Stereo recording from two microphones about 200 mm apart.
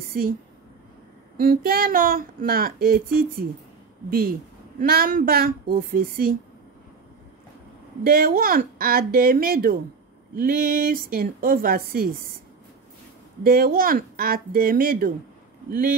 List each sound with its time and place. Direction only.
0.1 s a woman's voice: 45° right (ahead or behind)
1.4 s a woman's voice: 45° right (ahead or behind)
8.0 s a woman's voice: 45° right (ahead or behind)
13.4 s a woman's voice: 45° right (ahead or behind)